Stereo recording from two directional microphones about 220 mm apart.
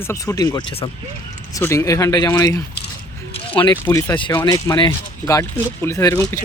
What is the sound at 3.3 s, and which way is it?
Squish, 25° left (ahead or behind).